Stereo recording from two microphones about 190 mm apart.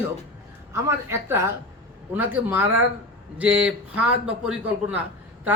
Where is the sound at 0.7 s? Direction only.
15° right (ahead or behind).